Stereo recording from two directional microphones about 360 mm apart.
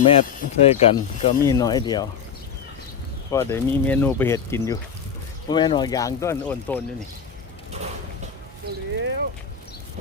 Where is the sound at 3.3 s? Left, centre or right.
Centre.